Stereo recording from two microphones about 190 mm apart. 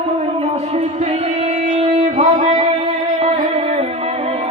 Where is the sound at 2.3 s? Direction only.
25° right (ahead or behind).